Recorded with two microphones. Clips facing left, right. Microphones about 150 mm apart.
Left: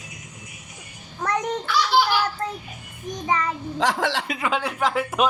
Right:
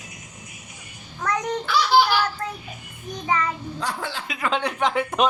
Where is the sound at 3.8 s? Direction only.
90° left.